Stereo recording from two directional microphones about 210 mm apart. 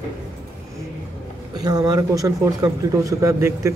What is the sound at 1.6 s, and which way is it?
Speech, 20° right (ahead or behind).